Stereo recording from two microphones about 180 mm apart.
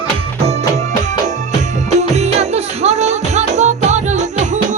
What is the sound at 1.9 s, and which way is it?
Music, 40° right (ahead or behind).